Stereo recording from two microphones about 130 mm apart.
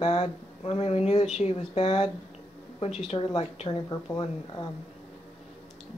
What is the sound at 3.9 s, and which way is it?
Speech, 30° left (ahead or behind).